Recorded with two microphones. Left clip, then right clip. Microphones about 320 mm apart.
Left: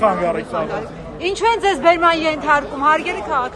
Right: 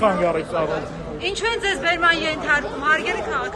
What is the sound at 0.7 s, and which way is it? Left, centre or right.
A man's voice, centre.